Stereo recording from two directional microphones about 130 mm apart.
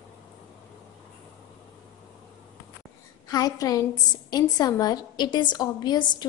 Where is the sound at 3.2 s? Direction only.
30° left (ahead or behind).